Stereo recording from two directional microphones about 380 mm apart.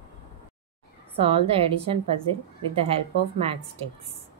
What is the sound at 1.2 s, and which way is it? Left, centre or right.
A woman's voice, centre.